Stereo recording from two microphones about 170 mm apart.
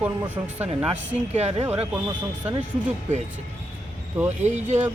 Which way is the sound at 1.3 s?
40° right (ahead or behind).